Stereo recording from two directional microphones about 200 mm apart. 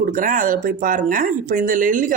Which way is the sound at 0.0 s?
40° right (ahead or behind).